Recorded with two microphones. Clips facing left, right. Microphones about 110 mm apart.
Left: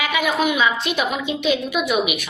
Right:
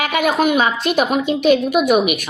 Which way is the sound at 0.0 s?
50° right (ahead or behind).